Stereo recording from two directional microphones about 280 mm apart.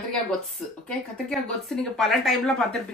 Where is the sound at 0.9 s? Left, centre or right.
Centre.